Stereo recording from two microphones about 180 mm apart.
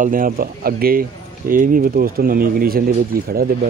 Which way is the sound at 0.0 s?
50° right (ahead or behind).